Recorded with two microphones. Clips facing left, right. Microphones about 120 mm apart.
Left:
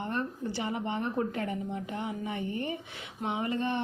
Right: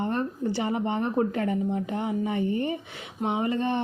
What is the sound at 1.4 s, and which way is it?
Speech, 50° right (ahead or behind).